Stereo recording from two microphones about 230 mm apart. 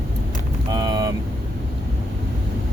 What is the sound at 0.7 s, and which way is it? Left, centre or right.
Speech, centre.